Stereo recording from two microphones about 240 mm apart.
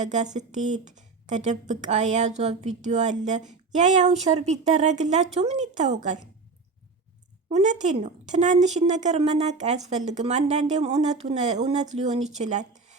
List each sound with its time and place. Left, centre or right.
0.0 s speech: right
7.5 s speech: right